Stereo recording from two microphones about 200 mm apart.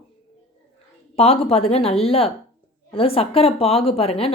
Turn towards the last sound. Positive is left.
turn(degrees=30)  # may be behind; listen again after turning